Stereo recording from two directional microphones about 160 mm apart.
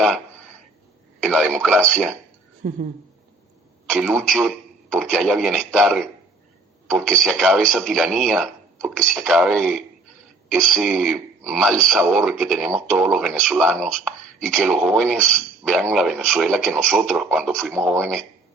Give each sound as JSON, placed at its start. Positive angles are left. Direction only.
{"t": 0.0, "sound": "a sound", "side_deg": 5}
{"t": 1.2, "sound": "speech", "side_deg": 5}
{"t": 3.8, "sound": "a man's voice", "side_deg": 0}